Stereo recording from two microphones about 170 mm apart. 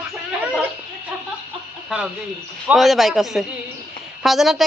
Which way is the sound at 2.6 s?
Centre (ahead or behind).